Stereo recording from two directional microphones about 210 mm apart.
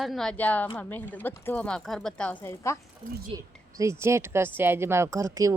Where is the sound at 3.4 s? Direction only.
15° right (ahead or behind).